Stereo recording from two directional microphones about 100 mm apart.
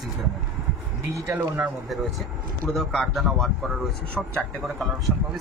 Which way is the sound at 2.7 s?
Centre (ahead or behind).